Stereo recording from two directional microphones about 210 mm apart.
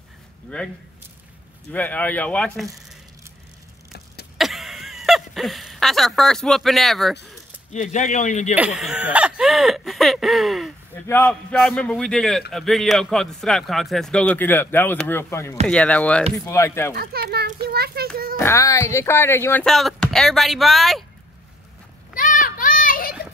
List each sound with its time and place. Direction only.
0.5 s a man's voice: 5° left (ahead or behind)
4.4 s a sound: centre (ahead or behind)
7.7 s a man's voice: 35° left (ahead or behind)
8.5 s a man's voice: 5° right (ahead or behind); by 16.9 s 10° left (ahead or behind)
16.9 s a child's voice: 50° right (ahead or behind)
18.4 s a man's voice: 15° left (ahead or behind)
22.1 s a sound: 40° left (ahead or behind)